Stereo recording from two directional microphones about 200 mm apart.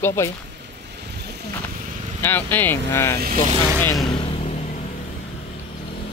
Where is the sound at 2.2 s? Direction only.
10° left (ahead or behind).